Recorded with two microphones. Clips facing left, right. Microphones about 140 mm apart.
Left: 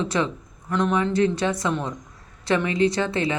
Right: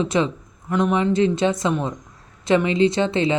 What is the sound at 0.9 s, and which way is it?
Speech, 20° right (ahead or behind).